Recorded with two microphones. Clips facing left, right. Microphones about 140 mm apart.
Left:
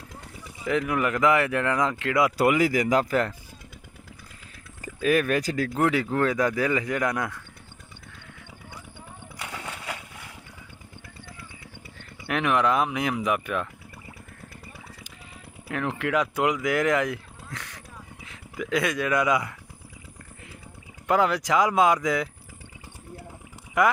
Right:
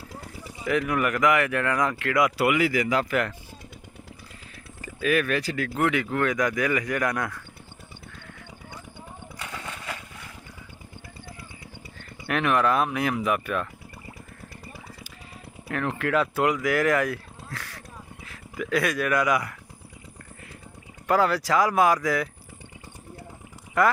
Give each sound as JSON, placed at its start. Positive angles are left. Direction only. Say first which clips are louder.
{"t": 0.7, "sound": "speech", "louder": "even", "side_deg": 25}
{"t": 2.3, "sound": "speech", "louder": "left 1 dB", "side_deg": 40}
{"t": 4.8, "sound": "speech", "louder": "left 2 dB", "side_deg": 40}
{"t": 5.8, "sound": "speech", "louder": "left 1 dB", "side_deg": 30}
{"t": 9.4, "sound": "a sound", "louder": "left 1 dB", "side_deg": 10}
{"t": 12.3, "sound": "speech", "louder": "even", "side_deg": 15}
{"t": 15.7, "sound": "speech", "louder": "right 1 dB", "side_deg": 15}
{"t": 21.1, "sound": "speech", "louder": "even", "side_deg": 20}